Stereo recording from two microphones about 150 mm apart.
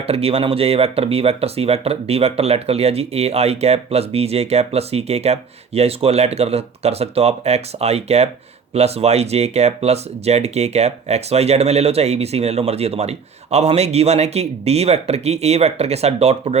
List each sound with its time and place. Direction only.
0.1 s speech: 40° right (ahead or behind)